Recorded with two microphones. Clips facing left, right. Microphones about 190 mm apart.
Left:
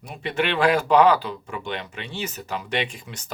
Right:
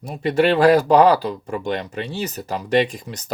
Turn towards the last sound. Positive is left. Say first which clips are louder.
# right 7 dB
turn(degrees=-40)  # may be behind; listen again after turning